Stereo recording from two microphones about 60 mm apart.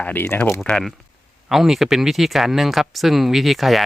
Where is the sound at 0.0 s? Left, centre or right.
Left.